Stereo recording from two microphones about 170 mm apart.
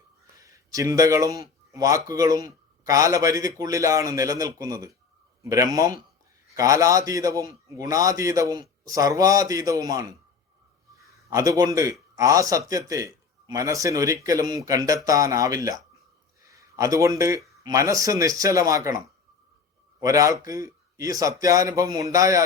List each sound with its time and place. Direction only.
0.3 s a man's voice: 20° right (ahead or behind)
11.3 s a man's voice: 20° right (ahead or behind)